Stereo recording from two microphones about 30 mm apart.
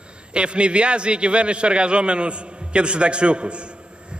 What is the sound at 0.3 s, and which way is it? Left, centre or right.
A man's voice, right.